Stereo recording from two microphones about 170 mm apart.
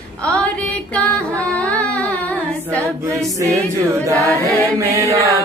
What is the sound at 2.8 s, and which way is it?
Choir, 15° right (ahead or behind).